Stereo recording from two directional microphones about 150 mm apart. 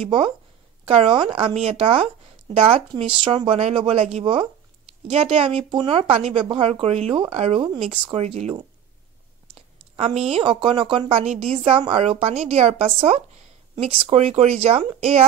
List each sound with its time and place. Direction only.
0.0 s a woman's voice: 35° right (ahead or behind)
9.9 s a woman's voice: 40° right (ahead or behind)